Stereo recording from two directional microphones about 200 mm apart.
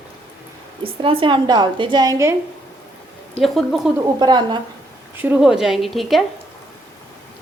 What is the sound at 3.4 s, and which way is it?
Speech, centre (ahead or behind).